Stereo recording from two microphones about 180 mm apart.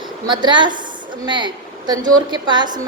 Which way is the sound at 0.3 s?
25° right (ahead or behind).